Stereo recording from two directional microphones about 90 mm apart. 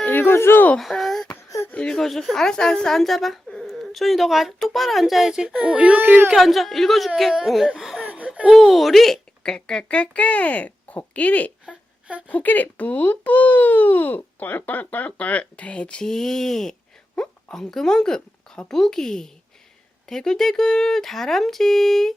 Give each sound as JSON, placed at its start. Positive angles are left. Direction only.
{"t": 0.0, "sound": "speech", "side_deg": 20}
{"t": 0.8, "sound": "a sound", "side_deg": 0}
{"t": 1.5, "sound": "speech", "side_deg": 35}
{"t": 1.7, "sound": "a woman's voice", "side_deg": 10}
{"t": 6.3, "sound": "a woman's voice", "side_deg": 0}
{"t": 7.8, "sound": "laughter", "side_deg": -5}
{"t": 8.0, "sound": "laughter", "side_deg": -15}
{"t": 8.4, "sound": "speech", "side_deg": 0}
{"t": 11.6, "sound": "a sound", "side_deg": -10}
{"t": 12.3, "sound": "a woman's voice", "side_deg": 20}